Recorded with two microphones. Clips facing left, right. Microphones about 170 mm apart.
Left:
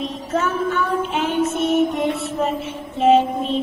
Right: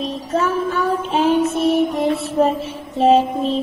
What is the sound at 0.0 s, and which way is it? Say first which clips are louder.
Child singing: right 2 dB; 35° right (ahead or behind).